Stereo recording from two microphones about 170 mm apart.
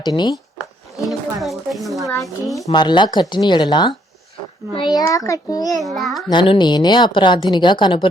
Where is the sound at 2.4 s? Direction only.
20° left (ahead or behind).